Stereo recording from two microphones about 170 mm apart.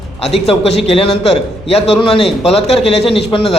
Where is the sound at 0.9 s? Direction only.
35° left (ahead or behind).